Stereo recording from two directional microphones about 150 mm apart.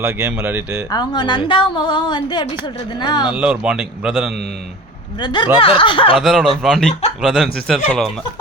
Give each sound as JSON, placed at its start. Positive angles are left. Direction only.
{"t": 0.0, "sound": "speech", "side_deg": -15}
{"t": 0.9, "sound": "a woman's voice", "side_deg": 30}
{"t": 3.3, "sound": "a man's voice", "side_deg": -10}
{"t": 5.2, "sound": "a woman's voice", "side_deg": 30}
{"t": 6.1, "sound": "a man's voice", "side_deg": 0}